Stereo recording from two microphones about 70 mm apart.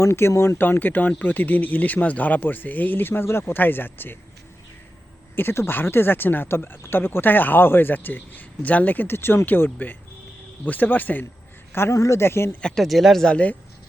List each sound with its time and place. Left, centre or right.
0.0 s speech: left
0.6 s speech: left
5.4 s a man's voice: left
11.9 s speech: left
12.6 s speech: centre
13.2 s speech: centre